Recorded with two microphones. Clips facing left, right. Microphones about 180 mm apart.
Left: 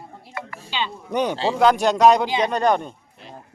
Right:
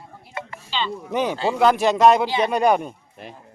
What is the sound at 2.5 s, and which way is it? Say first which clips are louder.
Speech: right 1 dB; 10° right (ahead or behind).